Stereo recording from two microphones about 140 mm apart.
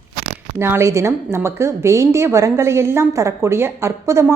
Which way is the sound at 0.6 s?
20° right (ahead or behind).